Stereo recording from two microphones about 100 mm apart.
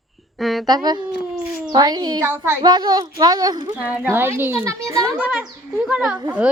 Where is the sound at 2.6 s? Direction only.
45° right (ahead or behind).